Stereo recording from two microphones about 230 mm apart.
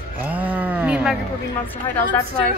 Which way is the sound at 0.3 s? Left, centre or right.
Centre.